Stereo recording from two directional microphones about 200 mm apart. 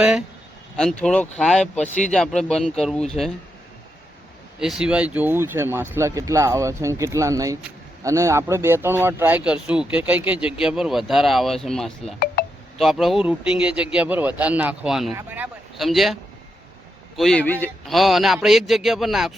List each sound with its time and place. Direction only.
0.8 s speech: 5° left (ahead or behind)
4.6 s speech: 5° right (ahead or behind)
12.4 s telephone dialing: 50° left (ahead or behind)
12.8 s speech: centre (ahead or behind)
17.2 s speech: 5° left (ahead or behind)